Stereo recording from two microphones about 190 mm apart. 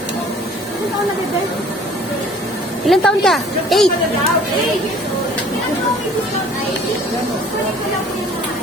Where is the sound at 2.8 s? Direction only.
Centre (ahead or behind).